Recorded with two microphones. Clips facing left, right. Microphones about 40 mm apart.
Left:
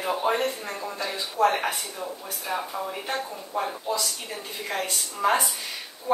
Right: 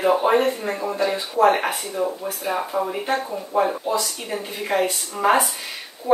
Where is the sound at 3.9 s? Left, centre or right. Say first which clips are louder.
Right 6 dB; right.